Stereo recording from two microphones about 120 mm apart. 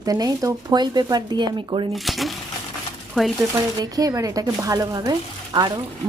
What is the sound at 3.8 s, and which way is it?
Speech, 30° right (ahead or behind).